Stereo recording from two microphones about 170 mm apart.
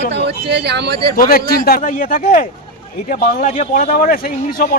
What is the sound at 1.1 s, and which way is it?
Speech, 60° left (ahead or behind).